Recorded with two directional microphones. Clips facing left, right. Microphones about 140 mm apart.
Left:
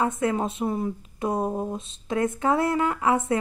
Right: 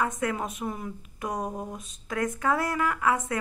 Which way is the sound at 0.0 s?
25° left (ahead or behind).